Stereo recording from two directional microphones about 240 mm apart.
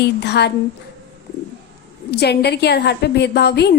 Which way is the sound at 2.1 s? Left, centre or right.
Left.